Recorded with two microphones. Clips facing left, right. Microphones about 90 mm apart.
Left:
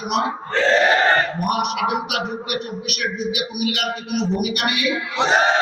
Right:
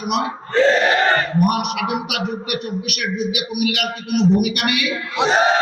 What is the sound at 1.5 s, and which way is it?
Music, 65° right (ahead or behind).